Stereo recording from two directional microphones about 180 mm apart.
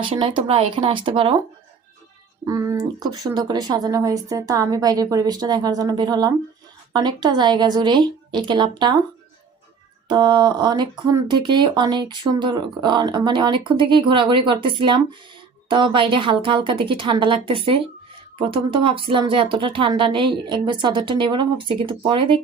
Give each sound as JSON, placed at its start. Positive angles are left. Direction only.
{"t": 0.0, "sound": "speech", "side_deg": -30}
{"t": 2.5, "sound": "speech", "side_deg": -20}
{"t": 10.1, "sound": "speech", "side_deg": -25}